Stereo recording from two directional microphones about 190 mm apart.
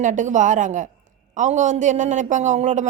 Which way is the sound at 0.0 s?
40° right (ahead or behind).